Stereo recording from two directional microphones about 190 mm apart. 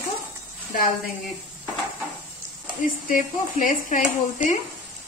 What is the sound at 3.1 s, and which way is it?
Speech, 45° left (ahead or behind).